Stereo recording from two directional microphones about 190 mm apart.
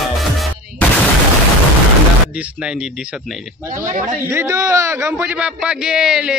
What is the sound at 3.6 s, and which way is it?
Speech, 45° right (ahead or behind).